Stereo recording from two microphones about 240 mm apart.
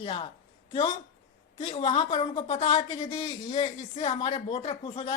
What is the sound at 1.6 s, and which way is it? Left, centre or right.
Speech, left.